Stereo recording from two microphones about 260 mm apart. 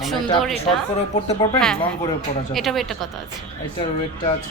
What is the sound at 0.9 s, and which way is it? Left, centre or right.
Speech, left.